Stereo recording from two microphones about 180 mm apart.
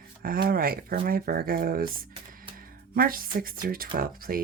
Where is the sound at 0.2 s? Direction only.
55° right (ahead or behind).